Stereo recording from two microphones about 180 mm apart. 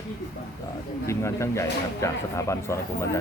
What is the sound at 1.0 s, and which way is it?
Speech, 15° left (ahead or behind).